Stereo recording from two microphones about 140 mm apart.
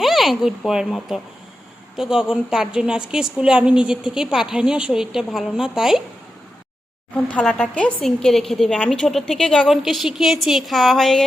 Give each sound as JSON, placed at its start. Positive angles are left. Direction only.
{"t": 0.0, "sound": "a woman's voice", "side_deg": 0}
{"t": 7.1, "sound": "a woman's voice", "side_deg": 10}